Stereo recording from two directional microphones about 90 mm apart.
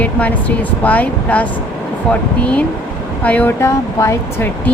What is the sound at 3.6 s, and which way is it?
Speech, 30° left (ahead or behind).